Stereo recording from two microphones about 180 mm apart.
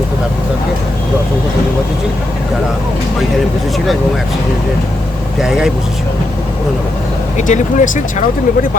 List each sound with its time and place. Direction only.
5.4 s speech: 5° right (ahead or behind)
7.3 s speech: 40° left (ahead or behind)